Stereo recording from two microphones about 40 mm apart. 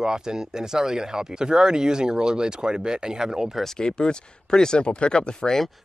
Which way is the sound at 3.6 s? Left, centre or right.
Centre.